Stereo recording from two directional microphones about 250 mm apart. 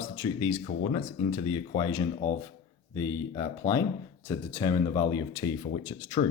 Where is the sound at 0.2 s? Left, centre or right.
Centre.